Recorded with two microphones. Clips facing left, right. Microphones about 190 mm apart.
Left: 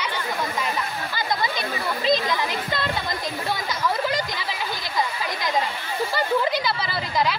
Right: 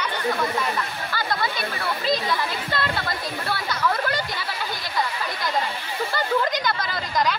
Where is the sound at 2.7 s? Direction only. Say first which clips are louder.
Even; 15° left (ahead or behind).